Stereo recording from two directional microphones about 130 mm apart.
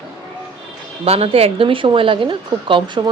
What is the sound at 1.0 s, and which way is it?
Speech, 50° right (ahead or behind).